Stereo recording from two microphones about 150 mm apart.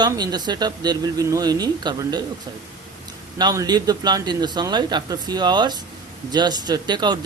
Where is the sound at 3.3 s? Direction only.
25° right (ahead or behind).